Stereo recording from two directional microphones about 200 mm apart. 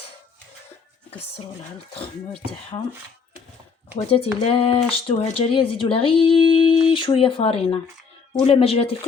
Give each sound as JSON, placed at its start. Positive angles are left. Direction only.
{"t": 1.9, "sound": "speech", "side_deg": 25}
{"t": 4.0, "sound": "speech", "side_deg": 30}